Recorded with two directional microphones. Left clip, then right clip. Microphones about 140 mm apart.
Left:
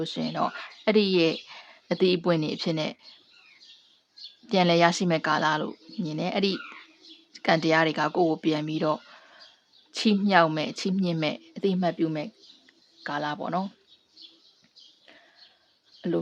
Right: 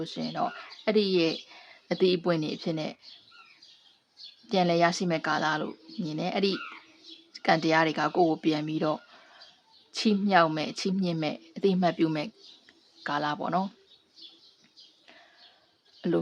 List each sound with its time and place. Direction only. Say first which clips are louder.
0.0 s speech: left 3 dB; 20° left (ahead or behind)
4.4 s speech: left 3 dB; 15° left (ahead or behind); by 13.7 s centre (ahead or behind)
16.0 s speech: even; 5° right (ahead or behind)